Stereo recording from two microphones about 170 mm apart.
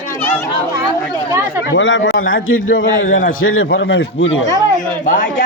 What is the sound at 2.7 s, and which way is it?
Speech, 55° left (ahead or behind).